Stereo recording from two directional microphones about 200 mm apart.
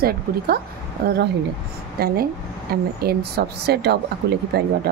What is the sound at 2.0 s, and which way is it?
A woman's voice, 50° right (ahead or behind).